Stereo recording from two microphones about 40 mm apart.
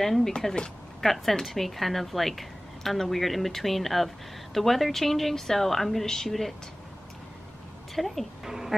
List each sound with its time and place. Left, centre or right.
0.0 s a woman's voice: centre
7.9 s a woman's voice: centre
8.5 s speech: centre